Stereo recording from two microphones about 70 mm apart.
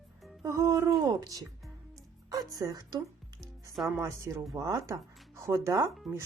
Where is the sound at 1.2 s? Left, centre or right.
Right.